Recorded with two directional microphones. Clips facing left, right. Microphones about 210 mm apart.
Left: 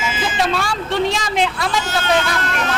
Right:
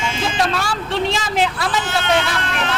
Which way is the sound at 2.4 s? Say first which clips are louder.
Left 1 dB; 40° left (ahead or behind).